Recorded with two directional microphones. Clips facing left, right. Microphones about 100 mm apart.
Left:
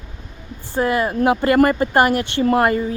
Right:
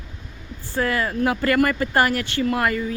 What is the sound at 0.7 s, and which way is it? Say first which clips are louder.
Speech: left 4 dB; 20° left (ahead or behind).